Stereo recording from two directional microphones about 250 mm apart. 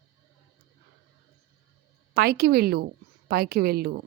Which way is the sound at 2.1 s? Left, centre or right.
Right.